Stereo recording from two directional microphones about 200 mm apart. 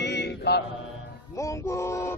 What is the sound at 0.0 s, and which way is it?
Mantra, 60° left (ahead or behind).